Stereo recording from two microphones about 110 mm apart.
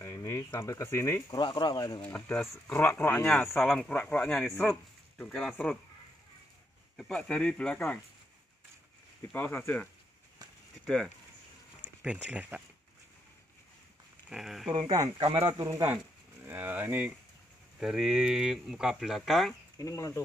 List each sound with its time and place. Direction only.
0.0 s a sound: 25° left (ahead or behind)
0.6 s speech: 25° left (ahead or behind)
1.4 s speech: 40° left (ahead or behind)
2.0 s speech: 10° left (ahead or behind)
3.3 s speech: centre (ahead or behind)
7.0 s speech: 5° left (ahead or behind)
9.3 s speech: 20° left (ahead or behind)
12.0 s speech: 10° right (ahead or behind)
14.3 s speech: centre (ahead or behind)
14.7 s speech: 40° right (ahead or behind)
15.5 s speech: 30° right (ahead or behind)
16.4 s speech: 20° right (ahead or behind)
17.7 s speech: 5° right (ahead or behind)
19.8 s speech: 30° left (ahead or behind)